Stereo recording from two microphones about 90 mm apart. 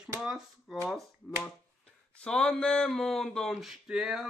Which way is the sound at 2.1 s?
10° left (ahead or behind).